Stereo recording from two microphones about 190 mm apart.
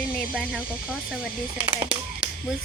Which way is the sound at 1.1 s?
5° right (ahead or behind).